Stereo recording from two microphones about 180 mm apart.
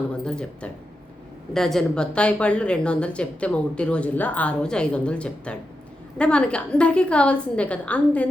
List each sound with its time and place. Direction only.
0.3 s a woman's voice: 5° left (ahead or behind)